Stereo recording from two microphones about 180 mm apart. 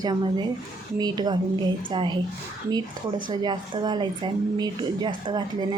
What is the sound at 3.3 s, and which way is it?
Speech, 25° right (ahead or behind).